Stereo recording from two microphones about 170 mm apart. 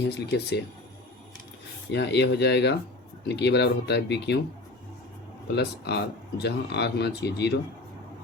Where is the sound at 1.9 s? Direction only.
90° left.